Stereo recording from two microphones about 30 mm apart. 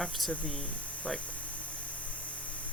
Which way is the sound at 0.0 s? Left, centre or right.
Centre.